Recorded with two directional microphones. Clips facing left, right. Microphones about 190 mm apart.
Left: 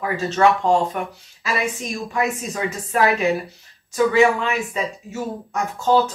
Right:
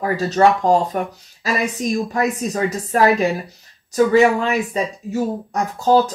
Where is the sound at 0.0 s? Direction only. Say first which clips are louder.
Right 3 dB; 40° right (ahead or behind).